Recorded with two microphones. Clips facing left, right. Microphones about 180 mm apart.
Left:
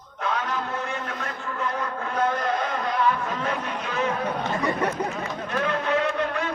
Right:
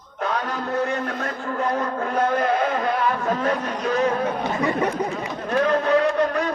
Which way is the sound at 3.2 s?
40° right (ahead or behind).